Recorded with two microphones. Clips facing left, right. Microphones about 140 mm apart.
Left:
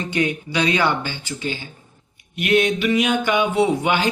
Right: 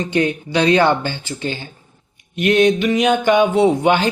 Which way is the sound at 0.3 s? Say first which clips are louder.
Right 5 dB; 35° right (ahead or behind).